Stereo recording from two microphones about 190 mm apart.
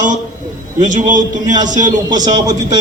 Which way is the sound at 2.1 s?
20° right (ahead or behind).